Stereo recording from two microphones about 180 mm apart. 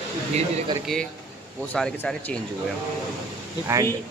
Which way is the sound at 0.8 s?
5° left (ahead or behind).